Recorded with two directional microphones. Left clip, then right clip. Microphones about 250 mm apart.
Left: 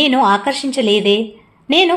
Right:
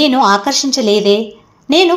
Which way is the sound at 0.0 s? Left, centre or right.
Centre.